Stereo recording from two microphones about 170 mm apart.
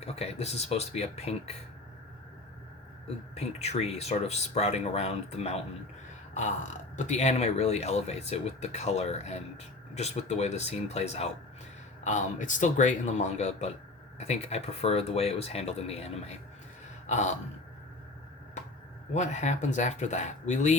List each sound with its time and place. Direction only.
0.0 s speech: 40° left (ahead or behind)
3.3 s speech: 40° left (ahead or behind)
19.1 s speech: 45° left (ahead or behind)